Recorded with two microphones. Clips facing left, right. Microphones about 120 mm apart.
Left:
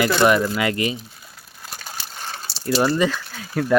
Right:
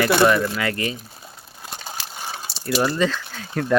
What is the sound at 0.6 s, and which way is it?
Speech, 20° left (ahead or behind).